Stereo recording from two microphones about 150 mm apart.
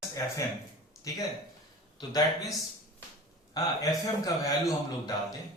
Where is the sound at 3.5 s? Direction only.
25° left (ahead or behind).